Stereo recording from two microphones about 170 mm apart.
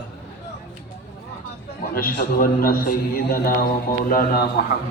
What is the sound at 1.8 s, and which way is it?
A man's voice, 55° left (ahead or behind).